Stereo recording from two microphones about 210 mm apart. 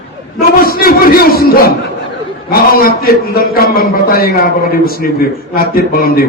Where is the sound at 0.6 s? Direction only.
45° left (ahead or behind).